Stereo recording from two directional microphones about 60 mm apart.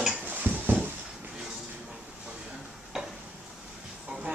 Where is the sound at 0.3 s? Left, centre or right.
Right.